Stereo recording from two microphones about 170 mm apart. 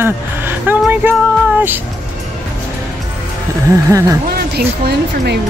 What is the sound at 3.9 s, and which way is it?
Speech, 20° right (ahead or behind).